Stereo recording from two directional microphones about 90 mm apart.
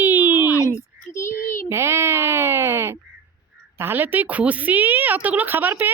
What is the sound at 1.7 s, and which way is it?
Speech, 30° right (ahead or behind).